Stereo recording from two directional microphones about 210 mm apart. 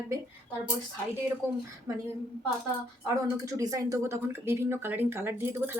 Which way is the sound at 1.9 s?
15° right (ahead or behind).